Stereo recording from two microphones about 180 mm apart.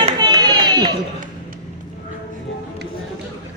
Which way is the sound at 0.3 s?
25° right (ahead or behind).